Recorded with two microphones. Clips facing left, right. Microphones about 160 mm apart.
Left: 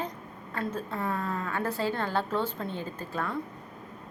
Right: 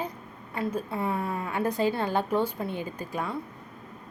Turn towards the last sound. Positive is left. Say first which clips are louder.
# right 1 dB
turn(degrees=-15)  # may be behind; listen again after turning